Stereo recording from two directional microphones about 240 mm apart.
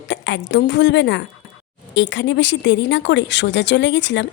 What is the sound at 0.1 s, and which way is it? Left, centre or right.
A woman's voice, left.